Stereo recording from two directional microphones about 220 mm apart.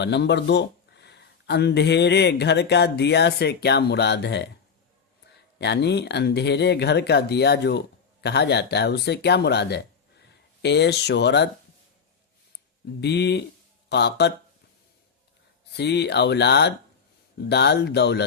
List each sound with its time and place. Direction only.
0.0 s speech: 50° left (ahead or behind)
5.5 s speech: 50° left (ahead or behind)
13.0 s speech: 50° left (ahead or behind)
15.7 s speech: 50° left (ahead or behind)